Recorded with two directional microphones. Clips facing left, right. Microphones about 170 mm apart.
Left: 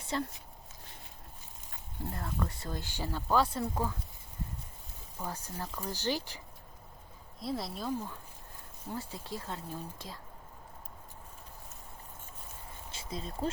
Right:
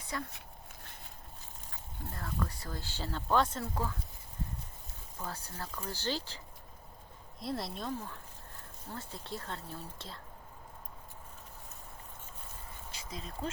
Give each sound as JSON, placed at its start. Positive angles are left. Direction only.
{"t": 0.0, "sound": "speech", "side_deg": 25}
{"t": 2.1, "sound": "speech", "side_deg": 20}
{"t": 5.1, "sound": "speech", "side_deg": 15}
{"t": 7.3, "sound": "speech", "side_deg": 0}
{"t": 12.9, "sound": "a sound", "side_deg": 30}